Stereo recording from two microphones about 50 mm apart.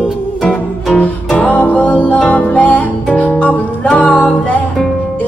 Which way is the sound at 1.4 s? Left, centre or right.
Left.